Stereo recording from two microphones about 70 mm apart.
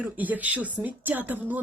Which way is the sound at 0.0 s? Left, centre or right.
Right.